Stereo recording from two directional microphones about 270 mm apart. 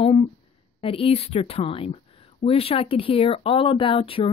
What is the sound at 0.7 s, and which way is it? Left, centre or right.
A woman's voice, left.